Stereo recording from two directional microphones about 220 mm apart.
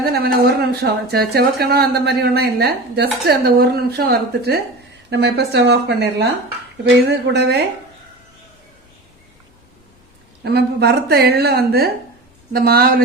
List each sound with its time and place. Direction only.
0.0 s speech: 45° right (ahead or behind)
7.3 s speech: 50° right (ahead or behind)
10.4 s speech: 45° right (ahead or behind)